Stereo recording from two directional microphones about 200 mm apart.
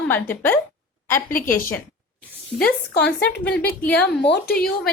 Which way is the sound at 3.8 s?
10° left (ahead or behind).